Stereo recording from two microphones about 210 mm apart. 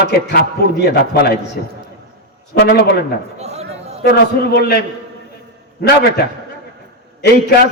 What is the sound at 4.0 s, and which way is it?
Speech, 50° left (ahead or behind).